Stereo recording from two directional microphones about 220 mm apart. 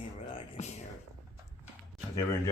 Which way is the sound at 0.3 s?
30° left (ahead or behind).